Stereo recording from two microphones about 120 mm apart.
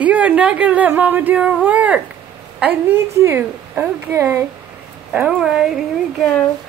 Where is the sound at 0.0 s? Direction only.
10° right (ahead or behind).